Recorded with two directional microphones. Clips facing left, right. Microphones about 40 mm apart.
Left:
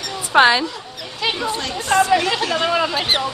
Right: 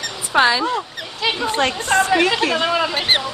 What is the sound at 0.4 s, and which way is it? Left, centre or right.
Speech, left.